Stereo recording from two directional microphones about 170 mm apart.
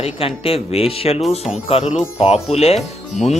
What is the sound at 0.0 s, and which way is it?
Speech, 35° left (ahead or behind).